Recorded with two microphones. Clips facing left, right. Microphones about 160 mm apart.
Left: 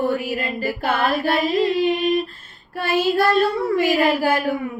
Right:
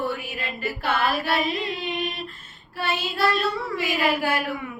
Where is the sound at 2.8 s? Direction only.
50° left (ahead or behind).